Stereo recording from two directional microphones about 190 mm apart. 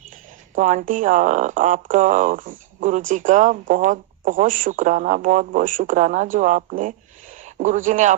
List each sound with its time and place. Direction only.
0.5 s speech: 45° right (ahead or behind)